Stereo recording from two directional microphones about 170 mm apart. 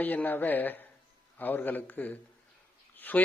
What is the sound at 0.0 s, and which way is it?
A man's voice, 10° left (ahead or behind).